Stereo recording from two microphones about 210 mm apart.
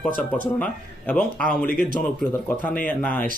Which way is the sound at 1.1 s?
5° left (ahead or behind).